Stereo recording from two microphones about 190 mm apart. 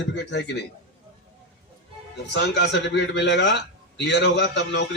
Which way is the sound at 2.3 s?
65° left (ahead or behind).